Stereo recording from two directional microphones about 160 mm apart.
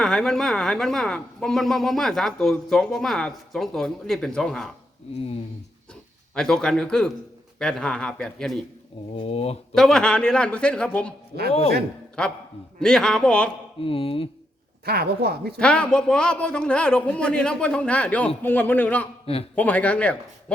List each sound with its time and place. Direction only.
0.0 s speech: 5° left (ahead or behind)
5.9 s speech: 5° left (ahead or behind)
9.1 s speech: 40° left (ahead or behind)
9.7 s a man's voice: 5° left (ahead or behind)
12.2 s speech: 5° left (ahead or behind)
13.8 s speech: 35° left (ahead or behind)
14.8 s a woman's voice: 85° right
15.5 s a man's voice: 5° left (ahead or behind)
19.2 s a man's voice: 40° left (ahead or behind)
19.5 s a man's voice: 10° left (ahead or behind)